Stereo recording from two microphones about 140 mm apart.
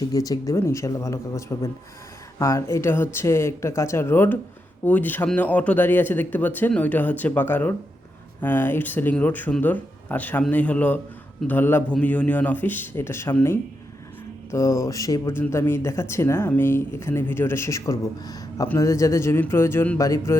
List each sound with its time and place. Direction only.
0.1 s speech: 25° left (ahead or behind)